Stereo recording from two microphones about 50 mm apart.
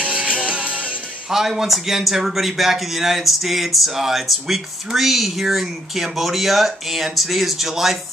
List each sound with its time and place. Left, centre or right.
0.0 s music: right
1.3 s a man's voice: centre